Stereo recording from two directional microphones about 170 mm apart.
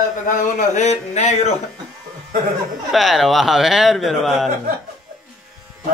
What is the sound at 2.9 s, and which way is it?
A man's voice, centre (ahead or behind).